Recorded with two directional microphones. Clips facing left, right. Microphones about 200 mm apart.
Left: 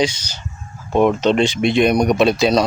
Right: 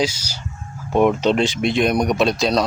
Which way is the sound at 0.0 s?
5° right (ahead or behind).